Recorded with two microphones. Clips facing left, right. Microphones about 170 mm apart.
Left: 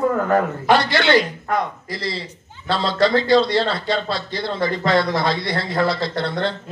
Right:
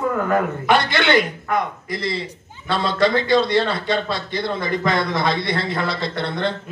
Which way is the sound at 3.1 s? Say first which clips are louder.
Left 1 dB; 20° right (ahead or behind).